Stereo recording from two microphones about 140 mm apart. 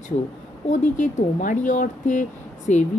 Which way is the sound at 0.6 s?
60° left (ahead or behind).